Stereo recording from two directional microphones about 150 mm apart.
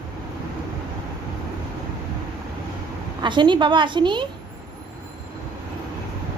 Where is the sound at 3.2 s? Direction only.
30° right (ahead or behind).